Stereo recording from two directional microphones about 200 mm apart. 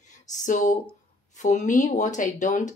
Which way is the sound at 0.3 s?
40° left (ahead or behind).